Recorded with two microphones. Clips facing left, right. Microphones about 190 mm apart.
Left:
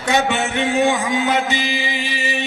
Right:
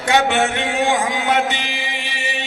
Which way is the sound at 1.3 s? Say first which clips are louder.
Even; 70° right (ahead or behind).